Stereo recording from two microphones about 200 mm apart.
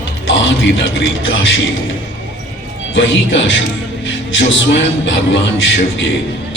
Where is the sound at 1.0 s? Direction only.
75° left (ahead or behind).